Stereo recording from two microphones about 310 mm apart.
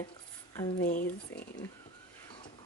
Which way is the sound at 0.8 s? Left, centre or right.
Left.